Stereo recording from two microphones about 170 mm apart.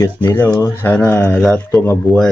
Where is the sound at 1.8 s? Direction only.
15° left (ahead or behind).